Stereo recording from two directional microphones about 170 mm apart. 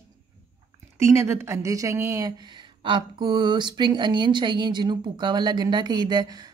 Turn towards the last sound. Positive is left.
turn(degrees=-25)  # may be behind; listen again after turning